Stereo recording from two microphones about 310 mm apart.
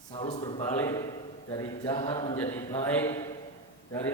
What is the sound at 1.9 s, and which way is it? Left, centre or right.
A man's voice, centre.